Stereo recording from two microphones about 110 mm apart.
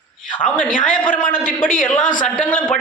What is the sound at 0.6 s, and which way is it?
A man's voice, 15° left (ahead or behind).